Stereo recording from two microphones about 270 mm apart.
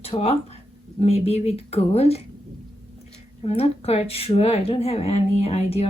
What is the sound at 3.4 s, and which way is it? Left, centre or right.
Speech, left.